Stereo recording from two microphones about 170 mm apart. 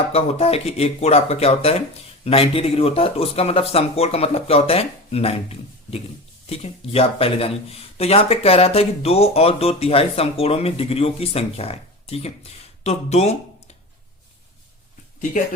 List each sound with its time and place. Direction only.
0.1 s speech: 35° left (ahead or behind)